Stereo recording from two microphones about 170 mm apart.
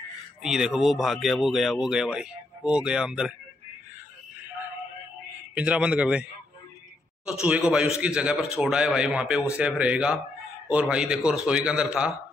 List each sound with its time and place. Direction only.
0.4 s speech: 5° right (ahead or behind)
5.5 s a man's voice: 10° right (ahead or behind)
7.2 s a man's voice: 5° right (ahead or behind)